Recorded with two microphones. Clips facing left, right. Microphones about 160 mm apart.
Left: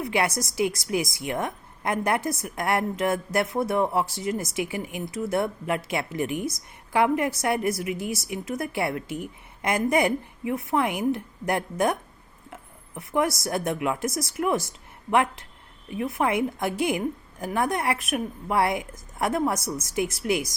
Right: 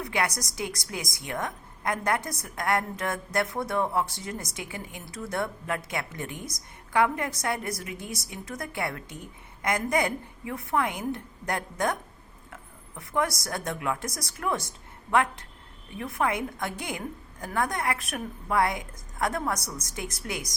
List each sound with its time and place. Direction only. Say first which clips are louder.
0.0 s a woman's voice: left 4 dB; 25° left (ahead or behind)
13.0 s a woman's voice: left 4 dB; 25° left (ahead or behind)